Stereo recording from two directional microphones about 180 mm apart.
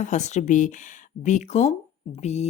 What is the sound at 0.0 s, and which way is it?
Speech, 40° left (ahead or behind).